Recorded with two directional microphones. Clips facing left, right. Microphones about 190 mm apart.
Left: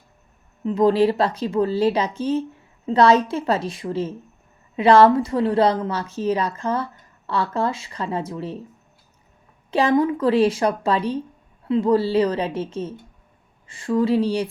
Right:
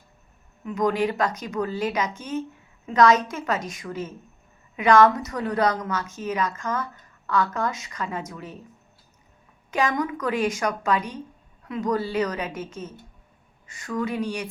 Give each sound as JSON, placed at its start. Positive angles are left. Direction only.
{"t": 0.6, "sound": "a woman's voice", "side_deg": 30}
{"t": 9.7, "sound": "a woman's voice", "side_deg": 30}